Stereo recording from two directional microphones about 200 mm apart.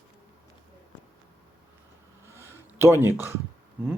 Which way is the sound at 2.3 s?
10° right (ahead or behind).